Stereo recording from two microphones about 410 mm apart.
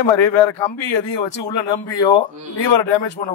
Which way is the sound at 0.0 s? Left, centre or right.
Left.